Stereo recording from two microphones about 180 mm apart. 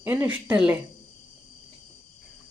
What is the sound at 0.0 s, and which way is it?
Speech, 10° right (ahead or behind).